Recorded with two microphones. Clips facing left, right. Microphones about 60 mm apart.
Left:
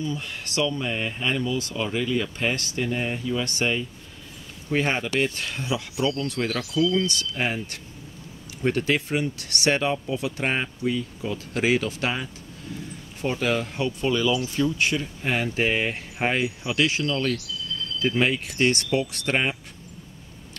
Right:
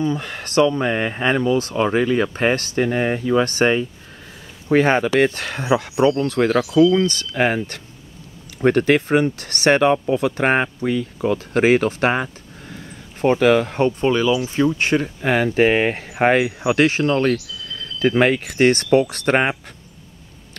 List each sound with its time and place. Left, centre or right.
0.0 s speech: right
4.6 s speech: right
6.4 s speech: right
8.5 s speech: right
11.3 s speech: right
13.8 s speech: right
15.2 s speech: right
15.6 s speech: right
16.0 s speech: right
18.7 s speech: right